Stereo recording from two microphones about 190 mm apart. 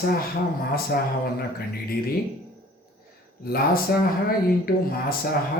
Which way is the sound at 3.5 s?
50° left (ahead or behind).